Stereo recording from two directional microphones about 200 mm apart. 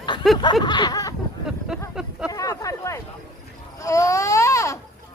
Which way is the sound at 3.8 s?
15° left (ahead or behind).